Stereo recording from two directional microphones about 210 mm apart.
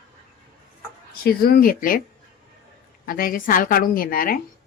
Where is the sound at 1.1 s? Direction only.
45° left (ahead or behind).